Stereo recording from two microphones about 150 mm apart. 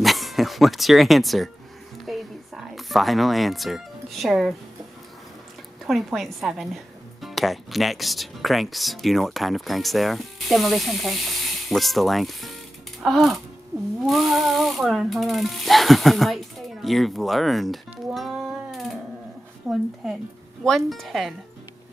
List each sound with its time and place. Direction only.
0.0 s speech: centre (ahead or behind)
2.0 s music: centre (ahead or behind)
5.9 s a woman's voice: centre (ahead or behind)
13.7 s speech: 25° right (ahead or behind)
14.0 s a woman's voice: centre (ahead or behind)